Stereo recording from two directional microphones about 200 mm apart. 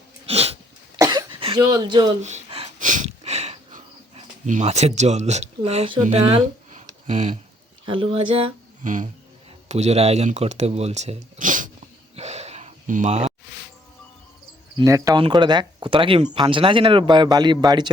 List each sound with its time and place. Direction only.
0.3 s a sound: 30° right (ahead or behind)
0.9 s cough: 20° right (ahead or behind)
1.6 s speech: 20° right (ahead or behind)
2.2 s gasp: 30° right (ahead or behind)
2.7 s sniff: 40° right (ahead or behind)
7.1 s speech: 35° right (ahead or behind)
7.9 s speech: 25° right (ahead or behind)
8.8 s a sound: 40° right (ahead or behind)
9.6 s speech: 35° right (ahead or behind)
12.1 s a sound: 35° right (ahead or behind)
14.8 s speech: 15° right (ahead or behind)